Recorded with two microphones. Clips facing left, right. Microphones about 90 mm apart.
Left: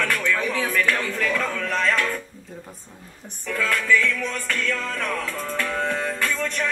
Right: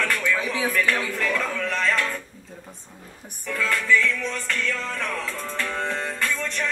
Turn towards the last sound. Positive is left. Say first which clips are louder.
# left 2 dB
turn(degrees=0)  # may be behind; listen again after turning